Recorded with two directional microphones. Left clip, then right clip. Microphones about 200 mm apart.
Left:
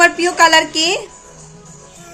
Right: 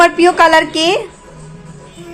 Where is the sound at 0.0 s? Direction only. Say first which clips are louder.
Right 3 dB; 10° left (ahead or behind).